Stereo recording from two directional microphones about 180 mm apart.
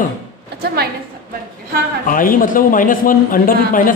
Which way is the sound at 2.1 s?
50° left (ahead or behind).